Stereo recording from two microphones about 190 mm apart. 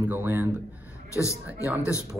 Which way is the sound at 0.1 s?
10° right (ahead or behind).